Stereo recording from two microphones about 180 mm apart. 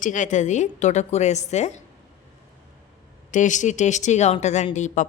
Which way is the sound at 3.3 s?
45° left (ahead or behind).